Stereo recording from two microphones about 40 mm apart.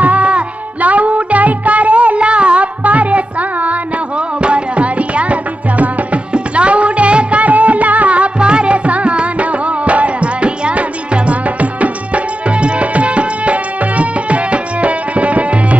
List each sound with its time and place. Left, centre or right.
0.0 s music: right
4.4 s music: right